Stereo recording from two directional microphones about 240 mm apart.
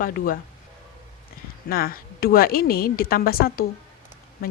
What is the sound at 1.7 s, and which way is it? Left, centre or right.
Speech, left.